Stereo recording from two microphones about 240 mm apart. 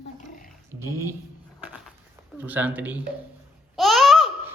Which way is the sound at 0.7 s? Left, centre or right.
Centre.